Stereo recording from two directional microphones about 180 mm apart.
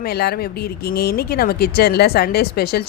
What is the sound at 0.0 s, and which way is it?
Speech, 60° left (ahead or behind).